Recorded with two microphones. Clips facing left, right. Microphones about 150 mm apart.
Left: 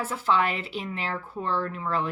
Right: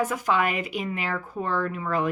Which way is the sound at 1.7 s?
10° right (ahead or behind).